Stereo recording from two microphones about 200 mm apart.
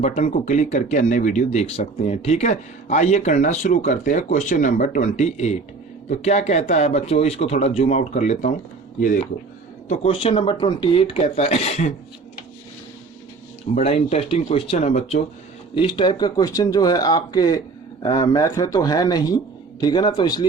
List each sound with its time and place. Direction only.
0.0 s speech: 35° left (ahead or behind)
9.9 s speech: 30° left (ahead or behind)
13.7 s speech: 30° left (ahead or behind)